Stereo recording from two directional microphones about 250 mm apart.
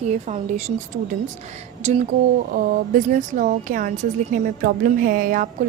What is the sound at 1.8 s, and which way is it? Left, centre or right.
Speech, right.